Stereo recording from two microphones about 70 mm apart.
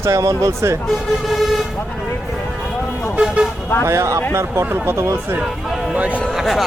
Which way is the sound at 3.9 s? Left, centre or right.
Right.